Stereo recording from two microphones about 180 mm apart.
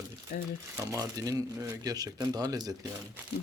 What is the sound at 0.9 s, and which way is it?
Speech, 20° right (ahead or behind).